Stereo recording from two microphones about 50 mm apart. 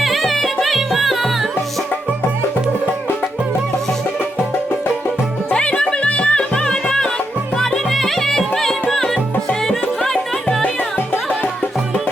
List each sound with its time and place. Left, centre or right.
0.0 s music: centre
5.5 s music: left